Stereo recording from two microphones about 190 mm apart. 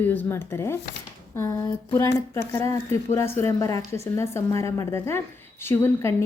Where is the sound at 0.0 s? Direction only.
10° left (ahead or behind).